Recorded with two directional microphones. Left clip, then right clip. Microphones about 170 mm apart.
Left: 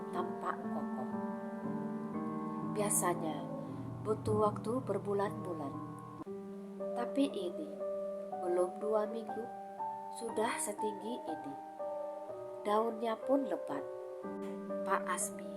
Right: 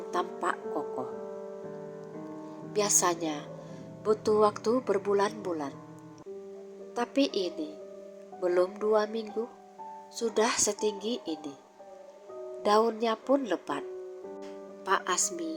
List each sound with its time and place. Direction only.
0.1 s music: 35° right (ahead or behind)
2.7 s speech: 35° right (ahead or behind)
6.9 s speech: 35° right (ahead or behind)
12.6 s speech: 35° right (ahead or behind)
14.8 s a woman's voice: 25° right (ahead or behind)